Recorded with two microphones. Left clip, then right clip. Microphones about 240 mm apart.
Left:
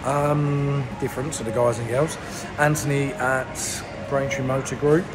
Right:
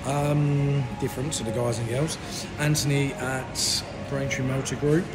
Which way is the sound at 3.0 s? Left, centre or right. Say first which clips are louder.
Left 7 dB; centre.